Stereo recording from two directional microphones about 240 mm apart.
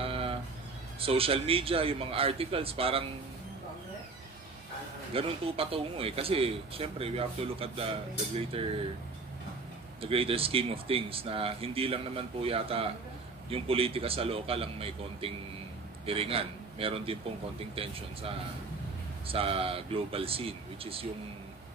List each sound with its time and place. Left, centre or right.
0.0 s a sound: right
0.9 s speech: right
5.1 s speech: right
10.0 s speech: right